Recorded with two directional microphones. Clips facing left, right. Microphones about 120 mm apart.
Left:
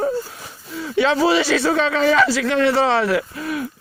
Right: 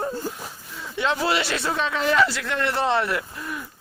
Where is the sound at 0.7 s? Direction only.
90° left.